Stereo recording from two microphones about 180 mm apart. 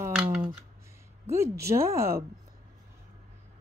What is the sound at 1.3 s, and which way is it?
Speech, 15° right (ahead or behind).